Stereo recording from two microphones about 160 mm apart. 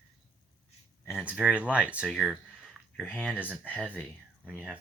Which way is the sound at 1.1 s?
5° right (ahead or behind).